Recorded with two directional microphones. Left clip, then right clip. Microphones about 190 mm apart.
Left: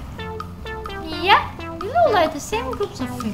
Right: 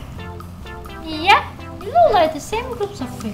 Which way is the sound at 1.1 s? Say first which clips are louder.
Right 3 dB; 5° left (ahead or behind).